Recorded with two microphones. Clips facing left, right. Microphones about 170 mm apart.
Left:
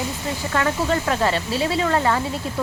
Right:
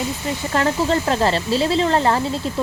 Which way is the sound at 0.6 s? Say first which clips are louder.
Right 3 dB; 30° right (ahead or behind).